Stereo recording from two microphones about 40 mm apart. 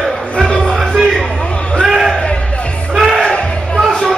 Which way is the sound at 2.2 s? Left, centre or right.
Left.